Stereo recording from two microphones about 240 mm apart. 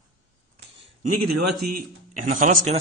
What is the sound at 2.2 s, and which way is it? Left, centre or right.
Speech, right.